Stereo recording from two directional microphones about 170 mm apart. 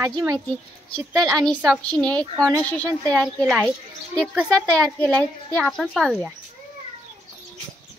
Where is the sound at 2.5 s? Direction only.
20° right (ahead or behind).